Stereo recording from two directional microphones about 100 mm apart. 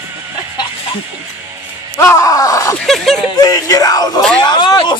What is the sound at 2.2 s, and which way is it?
Slap, 35° left (ahead or behind).